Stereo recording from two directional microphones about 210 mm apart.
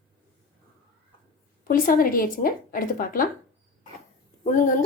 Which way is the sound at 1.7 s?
40° left (ahead or behind).